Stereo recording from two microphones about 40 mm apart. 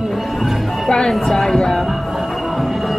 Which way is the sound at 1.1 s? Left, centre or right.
Centre.